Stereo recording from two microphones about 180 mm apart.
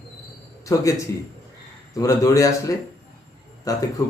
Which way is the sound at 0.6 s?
20° left (ahead or behind).